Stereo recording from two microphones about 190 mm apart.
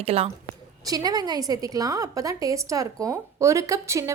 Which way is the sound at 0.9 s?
20° right (ahead or behind).